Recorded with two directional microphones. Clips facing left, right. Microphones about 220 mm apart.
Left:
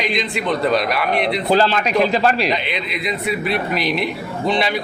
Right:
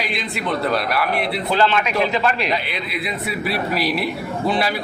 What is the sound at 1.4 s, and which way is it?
A man's voice, 35° left (ahead or behind).